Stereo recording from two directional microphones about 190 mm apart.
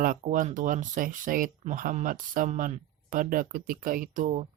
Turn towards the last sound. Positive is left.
turn(degrees=-45)  # may be behind; listen again after turning